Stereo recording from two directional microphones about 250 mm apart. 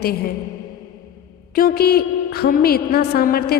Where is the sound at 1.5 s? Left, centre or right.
Left.